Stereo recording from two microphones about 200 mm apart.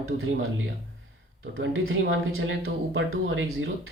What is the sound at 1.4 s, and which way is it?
Speech, 90° right.